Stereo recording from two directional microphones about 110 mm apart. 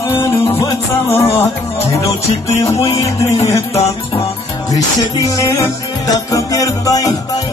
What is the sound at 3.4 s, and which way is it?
Music, 65° left (ahead or behind).